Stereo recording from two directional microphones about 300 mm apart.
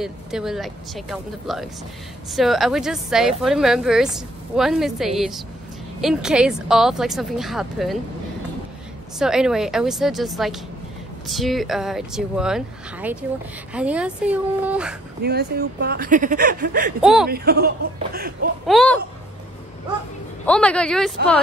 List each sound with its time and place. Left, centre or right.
0.0 s a woman's voice: centre
9.2 s a woman's voice: centre
15.2 s speech: right
17.0 s a woman's voice: centre
17.3 s speech: right
18.7 s a woman's voice: centre
20.4 s a woman's voice: centre